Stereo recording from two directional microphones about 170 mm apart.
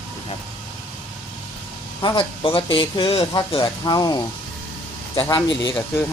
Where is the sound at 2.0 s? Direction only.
25° left (ahead or behind).